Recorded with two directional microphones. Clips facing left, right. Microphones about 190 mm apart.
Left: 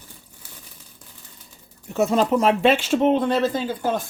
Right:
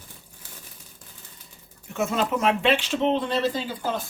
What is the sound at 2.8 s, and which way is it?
Speech, 50° left (ahead or behind).